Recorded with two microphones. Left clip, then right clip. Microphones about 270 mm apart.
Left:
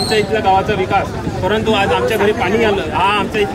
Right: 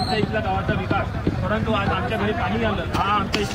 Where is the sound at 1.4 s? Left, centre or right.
Centre.